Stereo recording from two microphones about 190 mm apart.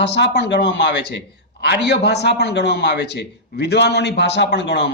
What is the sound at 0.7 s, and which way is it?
A man's voice, 65° left (ahead or behind).